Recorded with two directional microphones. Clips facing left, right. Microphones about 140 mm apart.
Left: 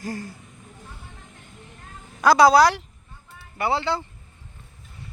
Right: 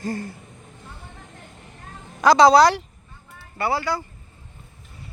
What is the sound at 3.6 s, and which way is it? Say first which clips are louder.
Speech: even; 25° left (ahead or behind).